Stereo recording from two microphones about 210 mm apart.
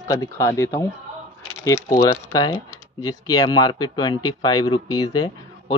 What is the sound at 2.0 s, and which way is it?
Speech, 20° left (ahead or behind).